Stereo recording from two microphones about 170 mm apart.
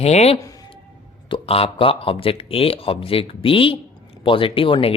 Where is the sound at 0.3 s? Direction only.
20° left (ahead or behind).